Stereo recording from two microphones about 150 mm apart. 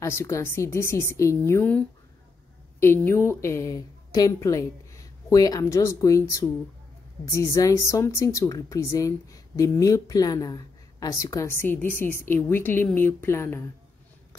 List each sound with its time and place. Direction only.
0.0 s speech: 20° left (ahead or behind)